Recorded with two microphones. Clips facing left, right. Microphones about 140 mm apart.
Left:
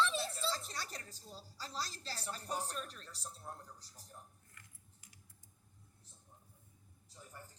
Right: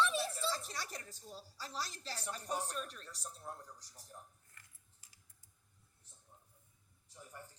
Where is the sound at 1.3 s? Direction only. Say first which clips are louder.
Right 1 dB; 10° right (ahead or behind).